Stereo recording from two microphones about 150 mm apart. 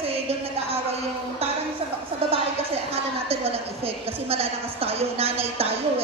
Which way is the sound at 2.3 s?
40° right (ahead or behind).